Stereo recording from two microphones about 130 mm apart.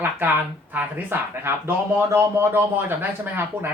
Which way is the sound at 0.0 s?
15° right (ahead or behind).